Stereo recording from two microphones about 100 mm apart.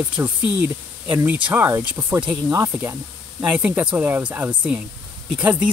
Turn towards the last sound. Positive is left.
turn(degrees=-15)  # may be behind; listen again after turning